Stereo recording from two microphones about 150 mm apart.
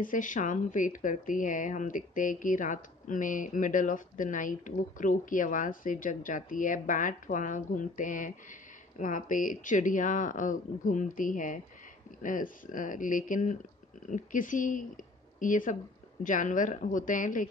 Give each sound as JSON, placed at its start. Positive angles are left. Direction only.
{"t": 0.0, "sound": "speech", "side_deg": 60}